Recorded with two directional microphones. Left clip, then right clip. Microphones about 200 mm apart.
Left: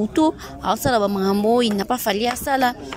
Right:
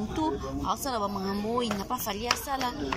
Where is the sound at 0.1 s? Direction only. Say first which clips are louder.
Left 8 dB; 55° left (ahead or behind).